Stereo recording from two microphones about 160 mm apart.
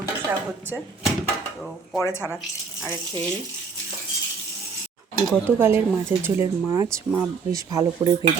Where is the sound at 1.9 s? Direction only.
15° left (ahead or behind).